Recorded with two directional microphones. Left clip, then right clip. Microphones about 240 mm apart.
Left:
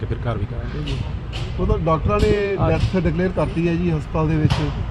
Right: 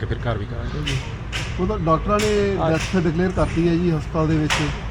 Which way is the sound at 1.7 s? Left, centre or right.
Left.